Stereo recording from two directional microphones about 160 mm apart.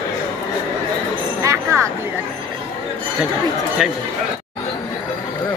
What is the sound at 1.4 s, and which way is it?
Speech, 20° right (ahead or behind).